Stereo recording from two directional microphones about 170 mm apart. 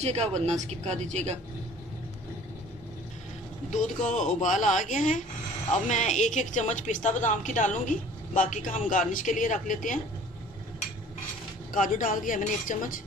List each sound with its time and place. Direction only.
0.0 s speech: 40° right (ahead or behind)
3.7 s a woman's voice: 50° left (ahead or behind)
11.7 s a woman's voice: 50° left (ahead or behind)